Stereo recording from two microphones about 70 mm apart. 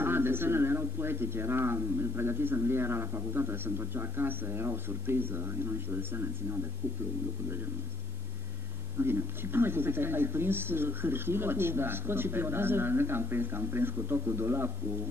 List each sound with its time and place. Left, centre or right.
0.0 s speech: right
9.0 s speech: right